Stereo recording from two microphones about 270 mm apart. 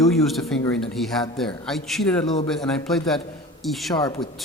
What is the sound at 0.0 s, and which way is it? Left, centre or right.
A man's voice, centre.